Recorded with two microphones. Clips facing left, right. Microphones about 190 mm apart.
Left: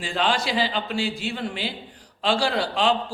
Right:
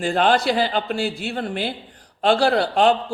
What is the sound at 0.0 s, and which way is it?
A man's voice, 55° right (ahead or behind).